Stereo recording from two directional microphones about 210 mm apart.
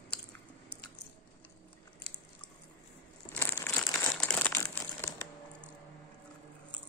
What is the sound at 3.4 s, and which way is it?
Crumpling, 10° left (ahead or behind).